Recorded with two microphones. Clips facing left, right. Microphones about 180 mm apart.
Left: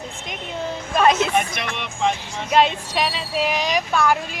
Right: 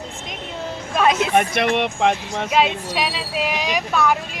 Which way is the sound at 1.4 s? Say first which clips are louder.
Right 7 dB; 60° right (ahead or behind).